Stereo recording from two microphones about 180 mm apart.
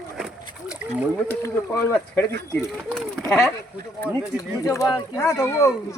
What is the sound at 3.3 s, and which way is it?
Speech, centre (ahead or behind).